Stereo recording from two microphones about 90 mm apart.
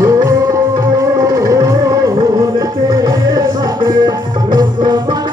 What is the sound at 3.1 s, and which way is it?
Music, 50° right (ahead or behind).